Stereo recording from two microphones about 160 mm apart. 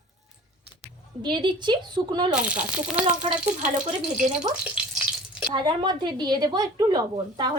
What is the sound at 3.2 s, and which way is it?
Speech, 50° right (ahead or behind).